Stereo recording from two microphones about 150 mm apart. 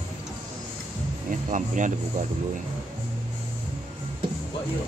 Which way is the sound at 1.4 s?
55° right (ahead or behind).